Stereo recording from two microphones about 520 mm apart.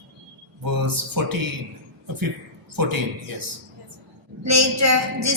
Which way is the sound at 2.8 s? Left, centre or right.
Right.